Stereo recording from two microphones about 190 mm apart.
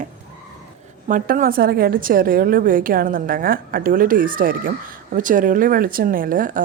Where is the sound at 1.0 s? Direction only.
45° right (ahead or behind).